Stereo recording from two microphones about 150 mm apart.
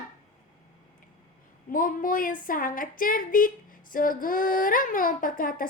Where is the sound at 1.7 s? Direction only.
65° left (ahead or behind).